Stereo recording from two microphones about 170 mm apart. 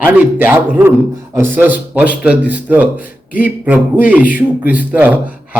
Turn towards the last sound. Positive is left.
turn(degrees=-10)  # may be behind; listen again after turning